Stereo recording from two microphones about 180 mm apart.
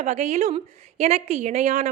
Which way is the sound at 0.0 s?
40° right (ahead or behind).